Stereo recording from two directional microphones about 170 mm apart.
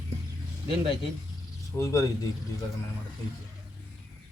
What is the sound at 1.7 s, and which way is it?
Speech, 20° left (ahead or behind).